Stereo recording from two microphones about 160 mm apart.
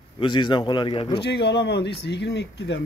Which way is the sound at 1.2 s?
90° left.